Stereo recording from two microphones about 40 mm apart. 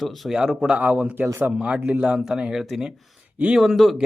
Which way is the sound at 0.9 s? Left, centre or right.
Right.